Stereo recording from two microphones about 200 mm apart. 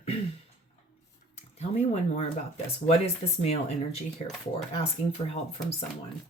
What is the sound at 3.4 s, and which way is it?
Speech, 30° left (ahead or behind).